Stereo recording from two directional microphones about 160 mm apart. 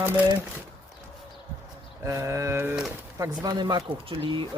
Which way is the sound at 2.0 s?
15° right (ahead or behind).